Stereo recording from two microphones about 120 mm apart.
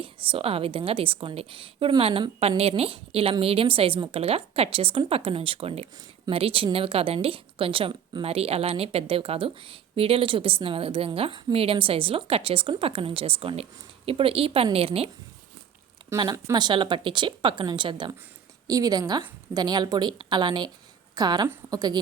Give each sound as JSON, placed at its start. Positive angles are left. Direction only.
{"t": 0.0, "sound": "a woman's voice", "side_deg": -45}
{"t": 16.3, "sound": "a woman's voice", "side_deg": -35}
{"t": 18.7, "sound": "a woman's voice", "side_deg": -30}
{"t": 21.4, "sound": "a woman's voice", "side_deg": -25}